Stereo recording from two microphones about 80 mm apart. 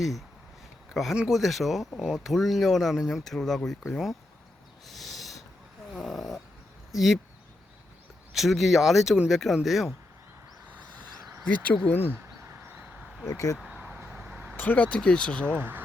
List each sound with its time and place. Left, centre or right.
1.1 s speech: centre
4.9 s owl: centre
5.9 s dog: centre
6.9 s speech: centre
8.3 s speech: centre
9.6 s speech: centre
11.4 s speech: centre
13.2 s speech: left
13.6 s vehicle: centre
13.8 s vehicle: centre
14.5 s speech: left
15.5 s speech: right